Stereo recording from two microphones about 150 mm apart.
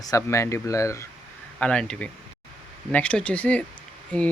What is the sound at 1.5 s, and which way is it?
Speech, 5° left (ahead or behind).